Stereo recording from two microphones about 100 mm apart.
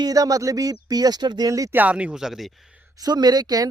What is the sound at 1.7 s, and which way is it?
Speech, 15° right (ahead or behind).